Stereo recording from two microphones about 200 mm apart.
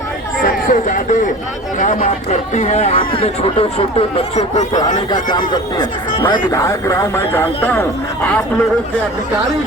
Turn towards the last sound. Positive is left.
turn(degrees=10)  # may be behind; listen again after turning